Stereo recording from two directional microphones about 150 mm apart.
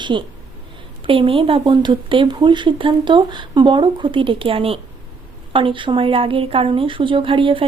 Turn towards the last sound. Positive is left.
turn(degrees=-35)  # may be behind; listen again after turning